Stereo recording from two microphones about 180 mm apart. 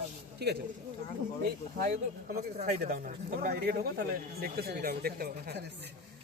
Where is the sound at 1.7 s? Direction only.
50° right (ahead or behind).